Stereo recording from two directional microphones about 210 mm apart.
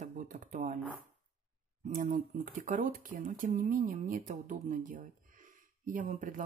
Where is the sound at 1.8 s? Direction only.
40° right (ahead or behind).